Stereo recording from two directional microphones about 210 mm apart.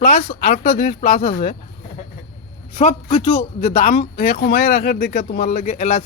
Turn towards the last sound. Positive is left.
turn(degrees=35)  # may be behind; listen again after turning